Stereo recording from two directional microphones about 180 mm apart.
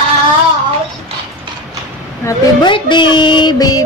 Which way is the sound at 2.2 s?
20° left (ahead or behind).